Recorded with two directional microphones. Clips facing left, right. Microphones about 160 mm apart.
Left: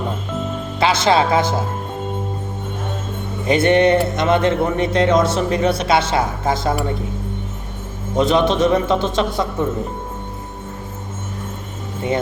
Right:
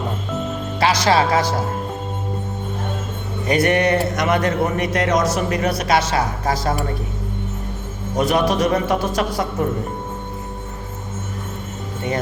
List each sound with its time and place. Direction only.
0.8 s a man's voice: 25° left (ahead or behind)
3.4 s a man's voice: 25° left (ahead or behind)
8.1 s a man's voice: 25° left (ahead or behind)